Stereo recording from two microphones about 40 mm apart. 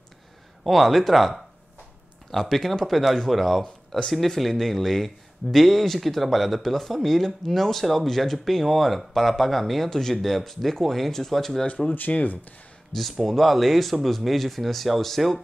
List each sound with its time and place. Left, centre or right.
0.7 s speech: centre
11.6 s speech: left
12.1 s speech: left
13.1 s speech: centre